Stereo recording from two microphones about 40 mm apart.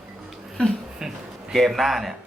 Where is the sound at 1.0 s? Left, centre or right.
Centre.